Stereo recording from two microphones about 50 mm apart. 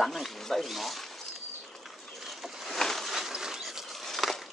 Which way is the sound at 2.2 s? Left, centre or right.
Centre.